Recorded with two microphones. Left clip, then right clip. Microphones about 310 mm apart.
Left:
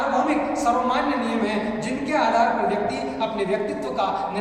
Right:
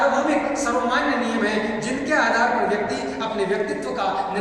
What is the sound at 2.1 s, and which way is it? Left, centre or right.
Speech, centre.